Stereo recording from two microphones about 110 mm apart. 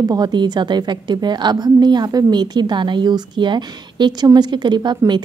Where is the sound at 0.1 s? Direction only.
40° right (ahead or behind).